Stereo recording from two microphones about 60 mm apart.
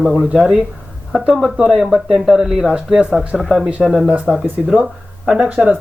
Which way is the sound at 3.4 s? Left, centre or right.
Centre.